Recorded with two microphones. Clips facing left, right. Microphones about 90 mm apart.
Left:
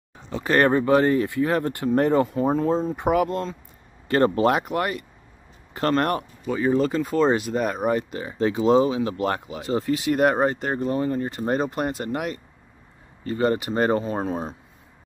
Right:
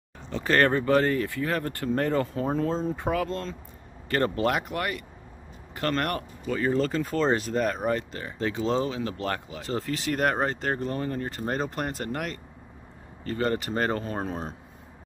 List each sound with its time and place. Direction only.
0.3 s speech: 10° left (ahead or behind)
9.6 s speech: 10° left (ahead or behind)